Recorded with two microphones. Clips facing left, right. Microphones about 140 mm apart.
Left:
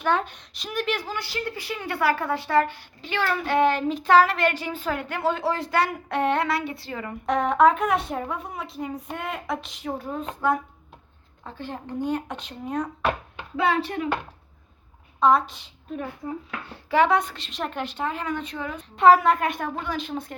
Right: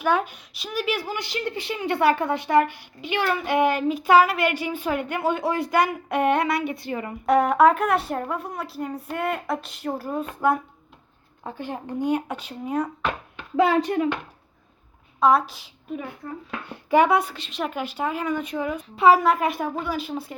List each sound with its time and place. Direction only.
0.0 s a woman's voice: 10° right (ahead or behind)
11.4 s speech: 15° right (ahead or behind)
13.6 s a woman's voice: 35° right (ahead or behind)
15.2 s a woman's voice: 5° right (ahead or behind)